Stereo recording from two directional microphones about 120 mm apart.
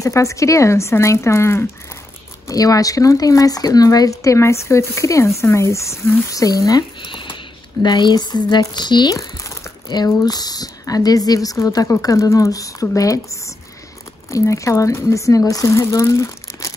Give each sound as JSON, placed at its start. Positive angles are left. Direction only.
{"t": 0.0, "sound": "speech", "side_deg": 25}
{"t": 6.3, "sound": "speech", "side_deg": 30}
{"t": 7.0, "sound": "a sound", "side_deg": 45}
{"t": 7.8, "sound": "speech", "side_deg": 35}
{"t": 14.3, "sound": "speech", "side_deg": 25}